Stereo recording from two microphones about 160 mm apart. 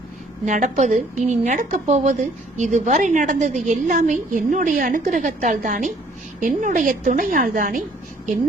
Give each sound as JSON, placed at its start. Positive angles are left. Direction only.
{"t": 0.4, "sound": "a woman's voice", "side_deg": -50}